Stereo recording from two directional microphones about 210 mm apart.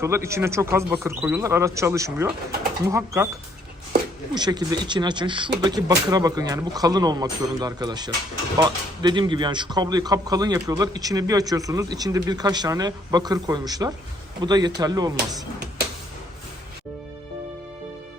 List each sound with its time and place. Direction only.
0.0 s speech: 15° right (ahead or behind)
4.4 s speech: 20° right (ahead or behind)